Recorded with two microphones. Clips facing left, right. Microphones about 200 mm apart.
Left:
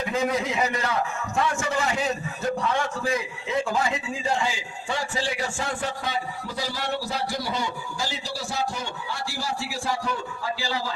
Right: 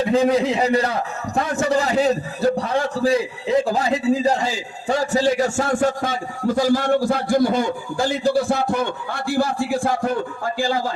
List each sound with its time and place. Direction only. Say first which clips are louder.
0.0 s a man's voice: right 8 dB; 30° right (ahead or behind); by 10.9 s 50° right (ahead or behind)